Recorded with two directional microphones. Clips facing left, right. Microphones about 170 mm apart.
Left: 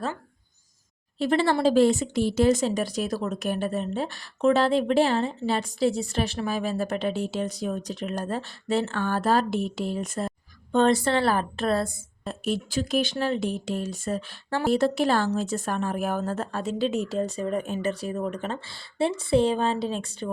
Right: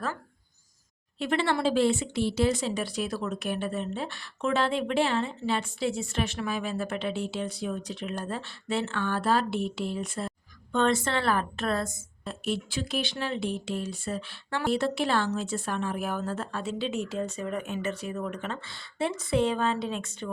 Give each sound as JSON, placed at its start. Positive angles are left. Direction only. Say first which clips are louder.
{"t": 1.2, "sound": "speech", "louder": "left 5 dB", "side_deg": 35}